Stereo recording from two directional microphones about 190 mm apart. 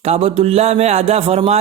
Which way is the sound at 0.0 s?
30° right (ahead or behind).